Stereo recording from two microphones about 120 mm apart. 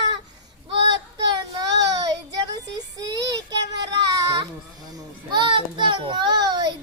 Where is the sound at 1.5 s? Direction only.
30° right (ahead or behind).